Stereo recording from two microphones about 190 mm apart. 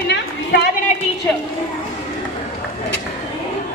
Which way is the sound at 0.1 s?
60° left (ahead or behind).